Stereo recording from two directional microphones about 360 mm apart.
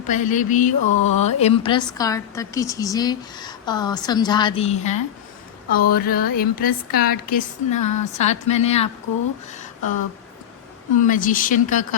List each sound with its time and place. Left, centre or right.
0.1 s a woman's voice: left
9.5 s a sound: centre
10.9 s speech: left